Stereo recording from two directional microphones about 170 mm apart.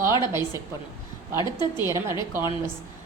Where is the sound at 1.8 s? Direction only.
15° right (ahead or behind).